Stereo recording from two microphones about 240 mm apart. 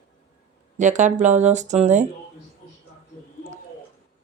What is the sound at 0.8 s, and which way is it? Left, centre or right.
Speech, right.